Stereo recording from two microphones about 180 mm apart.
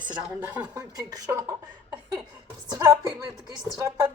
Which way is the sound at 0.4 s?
10° right (ahead or behind).